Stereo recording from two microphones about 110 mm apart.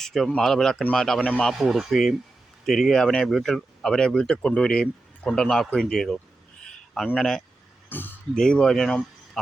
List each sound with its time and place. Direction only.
0.0 s speech: centre (ahead or behind)
6.7 s a sound: centre (ahead or behind)
7.9 s speech: 15° left (ahead or behind)
8.4 s speech: 5° left (ahead or behind)